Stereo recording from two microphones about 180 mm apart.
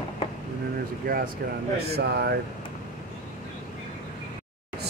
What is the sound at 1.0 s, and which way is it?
Speech, 50° right (ahead or behind).